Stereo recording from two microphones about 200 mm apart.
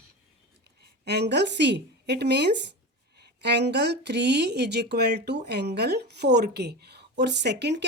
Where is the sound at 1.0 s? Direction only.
55° right (ahead or behind).